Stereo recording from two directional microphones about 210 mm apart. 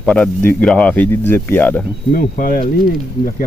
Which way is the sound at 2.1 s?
45° left (ahead or behind).